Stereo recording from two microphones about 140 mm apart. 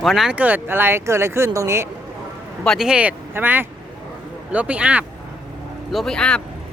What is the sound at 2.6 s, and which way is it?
Speech, centre (ahead or behind).